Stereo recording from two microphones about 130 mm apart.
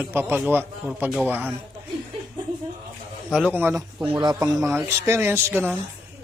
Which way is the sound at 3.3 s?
5° right (ahead or behind).